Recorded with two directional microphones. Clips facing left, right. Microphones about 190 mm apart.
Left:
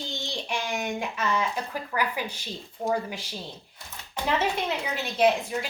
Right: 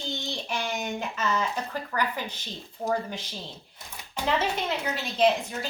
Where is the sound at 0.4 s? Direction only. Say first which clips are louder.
Left 2 dB; 10° left (ahead or behind).